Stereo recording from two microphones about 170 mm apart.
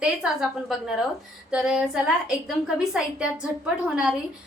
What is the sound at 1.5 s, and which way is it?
A woman's voice, 5° right (ahead or behind).